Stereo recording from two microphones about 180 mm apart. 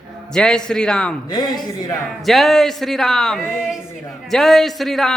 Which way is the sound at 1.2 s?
25° left (ahead or behind).